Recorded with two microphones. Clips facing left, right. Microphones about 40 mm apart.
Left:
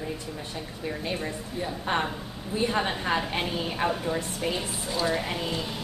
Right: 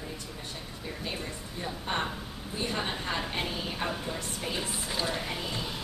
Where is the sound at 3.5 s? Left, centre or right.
Centre.